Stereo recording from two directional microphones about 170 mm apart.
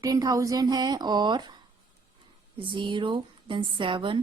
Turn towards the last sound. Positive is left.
turn(degrees=-30)  # may be behind; listen again after turning